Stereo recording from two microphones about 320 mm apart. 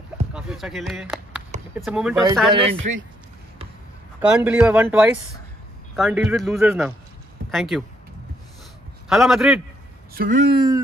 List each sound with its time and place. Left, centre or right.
0.3 s speech: centre
2.5 s speech: centre
4.2 s speech: centre
9.1 s speech: centre
10.1 s speech: right